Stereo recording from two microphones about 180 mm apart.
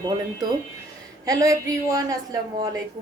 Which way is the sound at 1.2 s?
20° right (ahead or behind).